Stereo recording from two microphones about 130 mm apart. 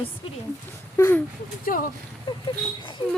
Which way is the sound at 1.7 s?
90° left.